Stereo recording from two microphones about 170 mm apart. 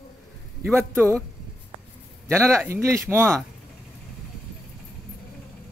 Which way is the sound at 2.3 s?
15° right (ahead or behind).